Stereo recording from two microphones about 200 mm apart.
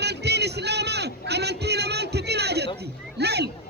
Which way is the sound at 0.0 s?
55° right (ahead or behind).